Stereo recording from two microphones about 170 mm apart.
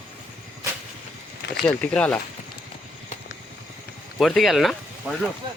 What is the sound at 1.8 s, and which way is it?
Speech, 5° left (ahead or behind).